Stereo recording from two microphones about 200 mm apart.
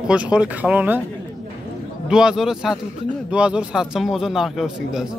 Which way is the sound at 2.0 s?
5° right (ahead or behind).